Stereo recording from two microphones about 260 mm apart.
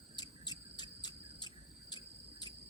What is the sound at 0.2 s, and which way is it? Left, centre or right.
Cricket, centre.